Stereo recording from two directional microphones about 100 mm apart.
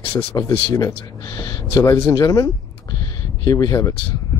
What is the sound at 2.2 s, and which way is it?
Speech, 35° left (ahead or behind).